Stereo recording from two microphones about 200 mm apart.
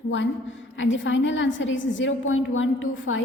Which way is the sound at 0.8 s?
70° left (ahead or behind).